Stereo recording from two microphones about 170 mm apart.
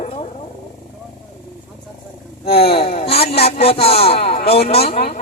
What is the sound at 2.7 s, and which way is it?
A man's voice, 35° left (ahead or behind).